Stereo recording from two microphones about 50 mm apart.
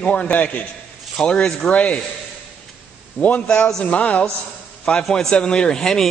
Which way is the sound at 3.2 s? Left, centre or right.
Left.